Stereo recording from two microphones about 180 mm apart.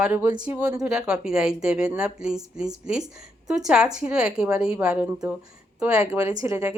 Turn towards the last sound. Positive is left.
turn(degrees=-20)  # may be behind; listen again after turning